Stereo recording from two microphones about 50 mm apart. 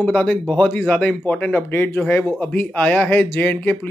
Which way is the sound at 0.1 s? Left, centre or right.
Left.